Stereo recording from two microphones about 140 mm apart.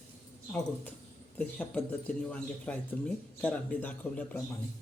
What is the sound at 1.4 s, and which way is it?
Speech, 10° left (ahead or behind).